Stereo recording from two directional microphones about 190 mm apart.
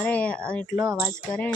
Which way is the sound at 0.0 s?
5° left (ahead or behind).